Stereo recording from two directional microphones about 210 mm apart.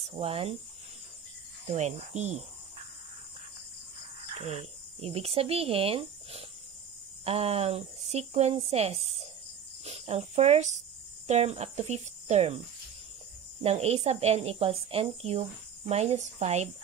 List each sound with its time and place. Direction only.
0.0 s speech: 25° right (ahead or behind)
1.7 s speech: 30° right (ahead or behind)
4.3 s speech: 30° right (ahead or behind)
13.6 s speech: 30° right (ahead or behind)